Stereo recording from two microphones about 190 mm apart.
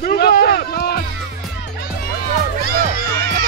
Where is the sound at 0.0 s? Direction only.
50° left (ahead or behind).